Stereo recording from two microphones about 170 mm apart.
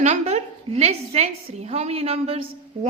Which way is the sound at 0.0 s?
45° right (ahead or behind).